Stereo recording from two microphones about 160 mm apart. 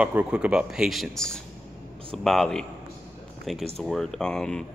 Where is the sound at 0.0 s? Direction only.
10° right (ahead or behind).